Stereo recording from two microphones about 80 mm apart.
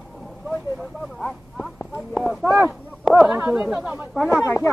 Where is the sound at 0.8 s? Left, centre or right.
Centre.